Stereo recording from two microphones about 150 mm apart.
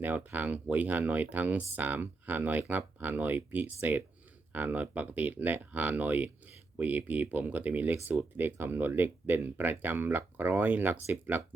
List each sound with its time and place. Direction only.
0.0 s speech: 10° right (ahead or behind)